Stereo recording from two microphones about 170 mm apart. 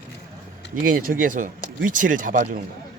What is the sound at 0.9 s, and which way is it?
Speech, 55° right (ahead or behind).